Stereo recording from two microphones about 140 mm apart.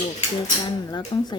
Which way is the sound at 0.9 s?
30° left (ahead or behind).